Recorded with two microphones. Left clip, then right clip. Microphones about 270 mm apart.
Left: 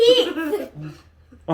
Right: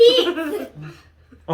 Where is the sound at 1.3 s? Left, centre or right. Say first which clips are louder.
Even; centre.